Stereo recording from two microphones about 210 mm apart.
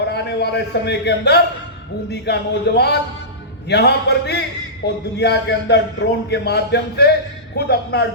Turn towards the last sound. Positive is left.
turn(degrees=50)  # may be behind; listen again after turning